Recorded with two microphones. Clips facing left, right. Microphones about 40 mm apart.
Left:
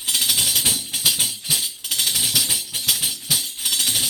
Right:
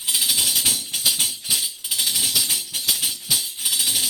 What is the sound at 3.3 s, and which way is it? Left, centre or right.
Tambourine, left.